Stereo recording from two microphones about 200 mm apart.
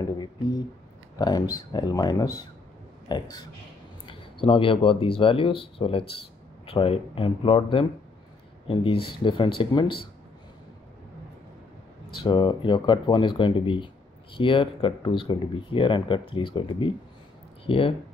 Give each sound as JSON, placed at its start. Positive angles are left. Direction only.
{"t": 0.2, "sound": "speech", "side_deg": 20}
{"t": 12.1, "sound": "speech", "side_deg": 25}